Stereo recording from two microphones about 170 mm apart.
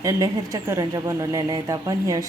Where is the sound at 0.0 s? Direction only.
20° right (ahead or behind).